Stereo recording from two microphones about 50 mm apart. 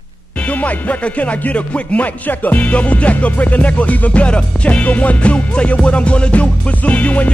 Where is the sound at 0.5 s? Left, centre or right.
Left.